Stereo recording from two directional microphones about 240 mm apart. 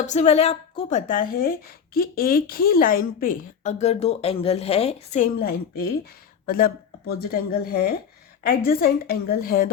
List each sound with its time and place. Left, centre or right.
0.0 s speech: left